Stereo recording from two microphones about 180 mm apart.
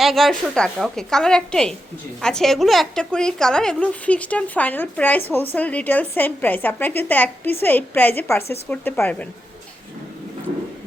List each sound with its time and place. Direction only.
0.0 s a woman's voice: centre (ahead or behind)